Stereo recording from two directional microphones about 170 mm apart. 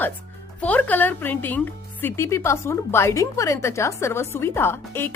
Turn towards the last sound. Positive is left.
turn(degrees=15)  # may be behind; listen again after turning